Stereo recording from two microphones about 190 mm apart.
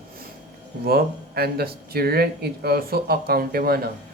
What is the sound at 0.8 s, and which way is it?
Speech, 55° right (ahead or behind).